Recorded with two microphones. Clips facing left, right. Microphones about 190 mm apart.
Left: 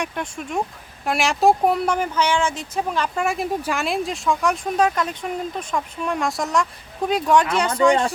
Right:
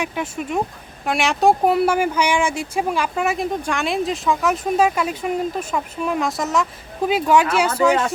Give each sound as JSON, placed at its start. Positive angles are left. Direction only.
{"t": 0.0, "sound": "speech", "side_deg": -5}